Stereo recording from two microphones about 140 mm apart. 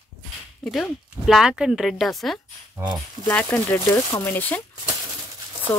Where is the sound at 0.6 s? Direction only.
Centre (ahead or behind).